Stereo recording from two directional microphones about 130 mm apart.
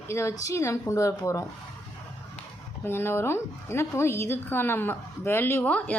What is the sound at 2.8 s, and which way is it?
A woman's voice, 20° left (ahead or behind).